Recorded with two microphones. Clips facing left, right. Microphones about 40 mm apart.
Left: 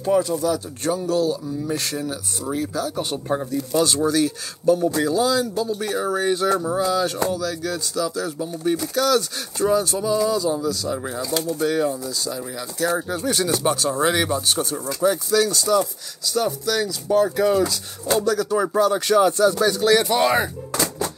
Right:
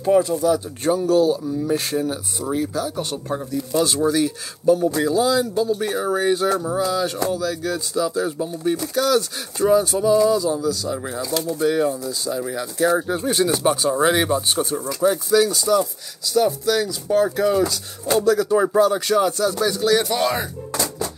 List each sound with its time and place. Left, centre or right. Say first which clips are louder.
0.0 s speech: right 3 dB; centre
1.1 s speech: right 4 dB; centre
2.4 s speech: right 2 dB; centre
3.0 s speech: left 2 dB; centre
3.5 s speech: right 1 dB; centre
7.2 s speech: right 2 dB; centre
8.4 s speech: right 1 dB; centre
12.1 s speech: right 3 dB; centre
14.9 s speech: right 1 dB; centre
18.2 s speech: right 6 dB; centre
18.7 s speech: right 1 dB; centre